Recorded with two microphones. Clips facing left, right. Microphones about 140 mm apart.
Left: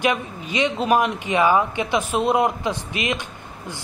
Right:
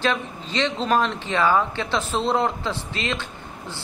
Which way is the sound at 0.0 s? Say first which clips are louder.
Left 2 dB; 15° left (ahead or behind).